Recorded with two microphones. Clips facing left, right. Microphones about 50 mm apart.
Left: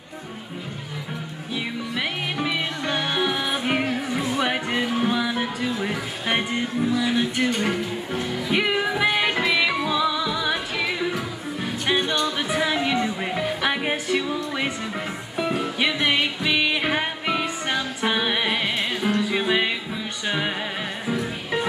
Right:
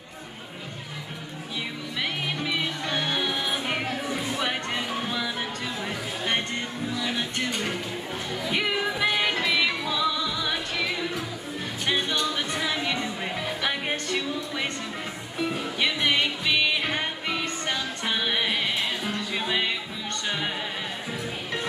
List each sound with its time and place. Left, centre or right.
2.0 s music: centre